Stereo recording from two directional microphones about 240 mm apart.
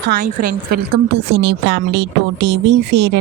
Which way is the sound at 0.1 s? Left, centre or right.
Right.